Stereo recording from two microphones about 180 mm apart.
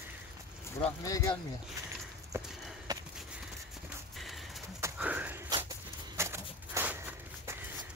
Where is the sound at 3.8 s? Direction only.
Centre (ahead or behind).